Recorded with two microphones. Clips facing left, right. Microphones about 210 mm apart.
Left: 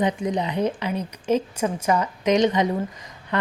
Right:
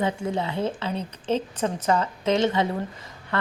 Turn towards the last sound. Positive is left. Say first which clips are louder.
# left 2 dB
turn(degrees=15)  # may be behind; listen again after turning